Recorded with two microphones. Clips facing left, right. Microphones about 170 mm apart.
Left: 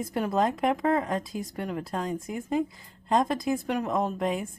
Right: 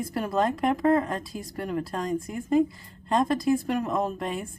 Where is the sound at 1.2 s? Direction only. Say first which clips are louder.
Left 1 dB; 20° left (ahead or behind).